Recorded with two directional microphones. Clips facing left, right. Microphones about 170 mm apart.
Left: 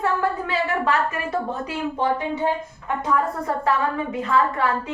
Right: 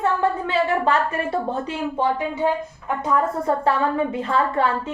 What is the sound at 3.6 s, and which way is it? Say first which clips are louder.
A woman's voice: even; 30° right (ahead or behind).